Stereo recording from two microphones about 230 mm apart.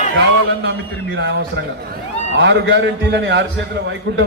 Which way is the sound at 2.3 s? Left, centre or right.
Right.